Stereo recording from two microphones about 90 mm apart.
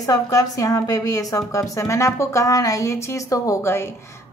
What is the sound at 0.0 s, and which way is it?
A woman's voice, 40° left (ahead or behind).